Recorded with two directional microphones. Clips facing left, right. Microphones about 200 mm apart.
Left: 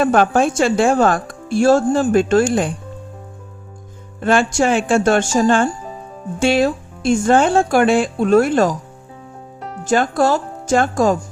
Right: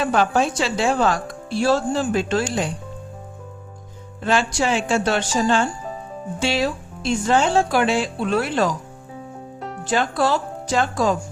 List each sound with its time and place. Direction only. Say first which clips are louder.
0.0 s speech: left 5 dB; 50° left (ahead or behind)
4.2 s speech: left 5 dB; 50° left (ahead or behind)
9.8 s speech: left 5 dB; 45° left (ahead or behind)